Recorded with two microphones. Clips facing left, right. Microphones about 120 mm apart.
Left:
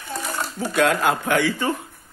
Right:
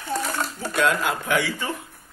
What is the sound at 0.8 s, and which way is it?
Speech, 55° left (ahead or behind).